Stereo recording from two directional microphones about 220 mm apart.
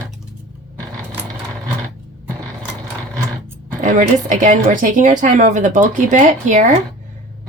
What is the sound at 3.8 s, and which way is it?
A woman's voice, 35° right (ahead or behind).